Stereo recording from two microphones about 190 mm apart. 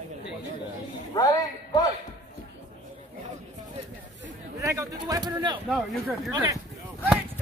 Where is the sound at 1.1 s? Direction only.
20° left (ahead or behind).